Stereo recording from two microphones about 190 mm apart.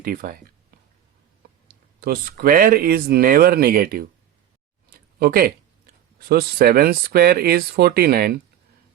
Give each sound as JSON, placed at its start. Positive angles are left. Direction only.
{"t": 0.0, "sound": "speech", "side_deg": -50}
{"t": 2.0, "sound": "speech", "side_deg": -50}